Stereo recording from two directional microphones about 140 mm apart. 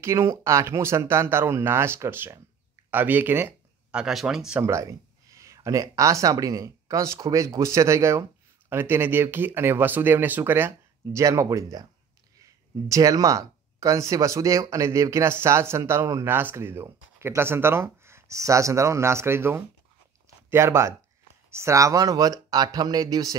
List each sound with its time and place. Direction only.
0.0 s speech: 20° right (ahead or behind); by 4.6 s 5° right (ahead or behind)
5.3 s speech: 20° right (ahead or behind)